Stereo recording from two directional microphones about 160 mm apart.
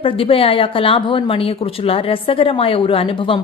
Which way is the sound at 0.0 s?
35° left (ahead or behind).